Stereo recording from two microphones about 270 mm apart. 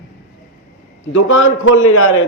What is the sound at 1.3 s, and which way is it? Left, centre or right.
Speech, left.